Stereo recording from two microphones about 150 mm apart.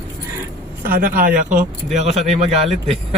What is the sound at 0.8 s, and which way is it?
Speech, 70° right (ahead or behind).